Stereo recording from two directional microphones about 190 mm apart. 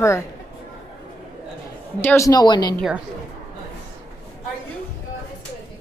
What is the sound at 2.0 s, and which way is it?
Speech, 15° left (ahead or behind).